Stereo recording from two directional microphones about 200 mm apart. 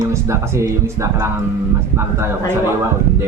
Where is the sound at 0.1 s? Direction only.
15° right (ahead or behind).